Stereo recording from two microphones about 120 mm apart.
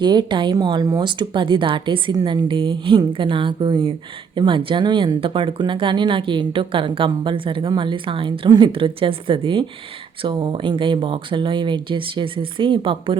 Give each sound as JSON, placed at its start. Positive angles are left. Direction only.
{"t": 0.0, "sound": "a woman's voice", "side_deg": -40}